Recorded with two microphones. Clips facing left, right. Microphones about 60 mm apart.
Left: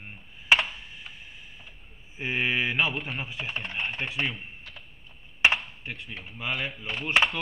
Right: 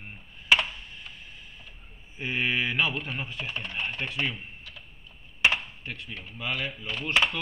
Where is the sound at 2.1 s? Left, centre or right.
Centre.